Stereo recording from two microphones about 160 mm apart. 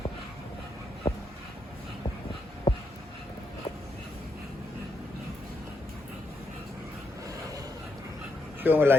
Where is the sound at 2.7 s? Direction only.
20° left (ahead or behind).